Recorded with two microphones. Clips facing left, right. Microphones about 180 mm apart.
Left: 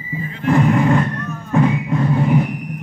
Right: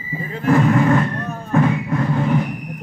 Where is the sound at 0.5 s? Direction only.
15° left (ahead or behind).